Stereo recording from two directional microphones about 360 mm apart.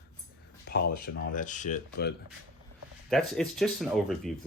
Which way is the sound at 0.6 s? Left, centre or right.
Left.